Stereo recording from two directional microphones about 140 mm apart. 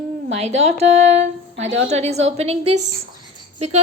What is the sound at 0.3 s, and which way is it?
A woman's voice, 50° right (ahead or behind).